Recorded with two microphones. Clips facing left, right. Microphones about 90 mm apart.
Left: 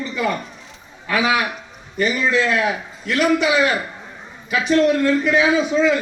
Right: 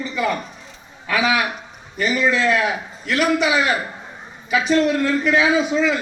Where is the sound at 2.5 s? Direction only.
15° right (ahead or behind).